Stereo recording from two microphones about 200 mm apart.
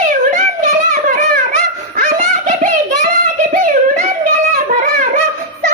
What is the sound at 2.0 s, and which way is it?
Giggle, 45° right (ahead or behind).